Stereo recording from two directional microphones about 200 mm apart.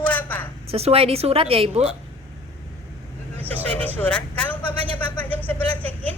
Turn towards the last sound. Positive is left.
turn(degrees=10)  # may be behind; listen again after turning